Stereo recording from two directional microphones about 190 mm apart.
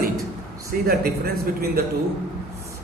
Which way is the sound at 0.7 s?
50° right (ahead or behind).